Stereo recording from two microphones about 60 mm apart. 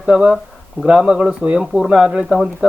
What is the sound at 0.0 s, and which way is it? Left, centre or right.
Speech, centre.